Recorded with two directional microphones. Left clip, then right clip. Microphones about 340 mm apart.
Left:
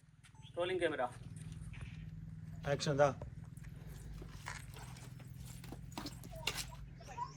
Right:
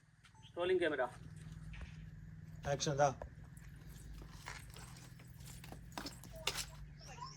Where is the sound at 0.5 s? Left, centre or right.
Right.